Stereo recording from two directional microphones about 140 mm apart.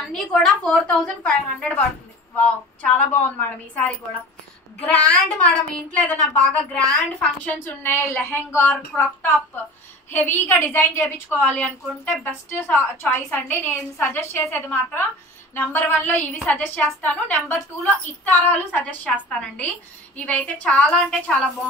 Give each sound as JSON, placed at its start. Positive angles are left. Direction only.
{"t": 0.1, "sound": "a woman's voice", "side_deg": 5}